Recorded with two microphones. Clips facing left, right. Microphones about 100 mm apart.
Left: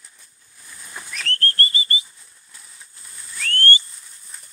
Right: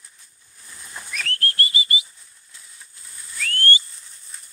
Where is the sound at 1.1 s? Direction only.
5° right (ahead or behind).